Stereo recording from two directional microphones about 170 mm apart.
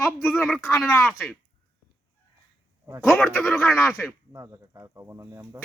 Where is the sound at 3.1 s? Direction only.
5° left (ahead or behind).